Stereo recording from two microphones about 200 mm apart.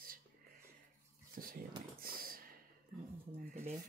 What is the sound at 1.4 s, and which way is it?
Speech, 45° right (ahead or behind).